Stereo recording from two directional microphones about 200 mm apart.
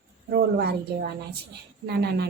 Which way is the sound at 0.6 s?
55° right (ahead or behind).